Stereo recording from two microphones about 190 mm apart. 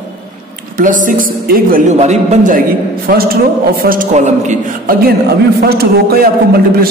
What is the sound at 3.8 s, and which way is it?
A man's voice, 45° right (ahead or behind).